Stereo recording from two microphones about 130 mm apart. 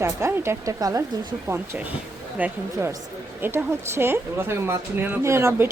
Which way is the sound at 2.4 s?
10° right (ahead or behind).